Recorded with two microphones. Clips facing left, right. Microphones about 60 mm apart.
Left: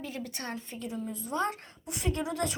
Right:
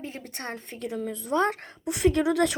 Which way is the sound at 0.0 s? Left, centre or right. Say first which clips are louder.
Right 1 dB; right.